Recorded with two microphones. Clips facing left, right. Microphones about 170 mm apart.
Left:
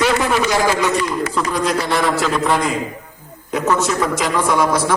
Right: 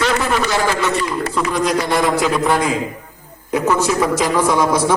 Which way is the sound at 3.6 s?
10° right (ahead or behind).